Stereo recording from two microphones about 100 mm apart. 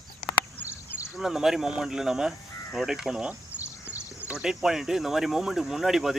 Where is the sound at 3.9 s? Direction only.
15° right (ahead or behind).